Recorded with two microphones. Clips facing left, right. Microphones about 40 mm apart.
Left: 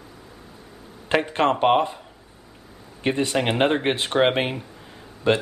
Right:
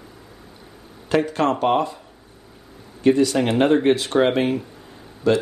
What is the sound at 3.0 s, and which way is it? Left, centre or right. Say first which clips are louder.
Speech: right 5 dB; left.